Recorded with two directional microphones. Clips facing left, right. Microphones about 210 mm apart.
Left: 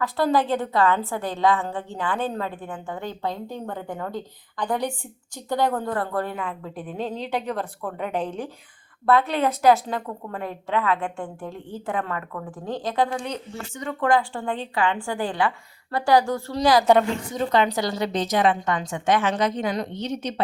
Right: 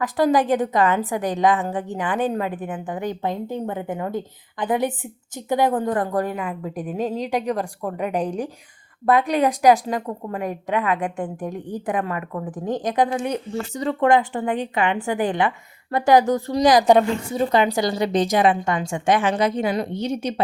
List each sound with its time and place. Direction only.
0.0 s a woman's voice: 15° right (ahead or behind)
13.7 s a woman's voice: 30° right (ahead or behind); by 20.4 s 10° right (ahead or behind)